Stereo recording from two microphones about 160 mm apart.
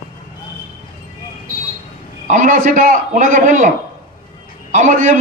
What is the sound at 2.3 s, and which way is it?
A man's voice, 55° right (ahead or behind).